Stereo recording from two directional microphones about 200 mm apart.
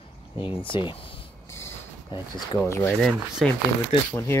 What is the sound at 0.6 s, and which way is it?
Speech, 25° left (ahead or behind).